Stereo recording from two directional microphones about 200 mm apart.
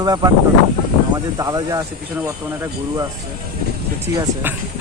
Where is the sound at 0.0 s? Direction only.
20° right (ahead or behind).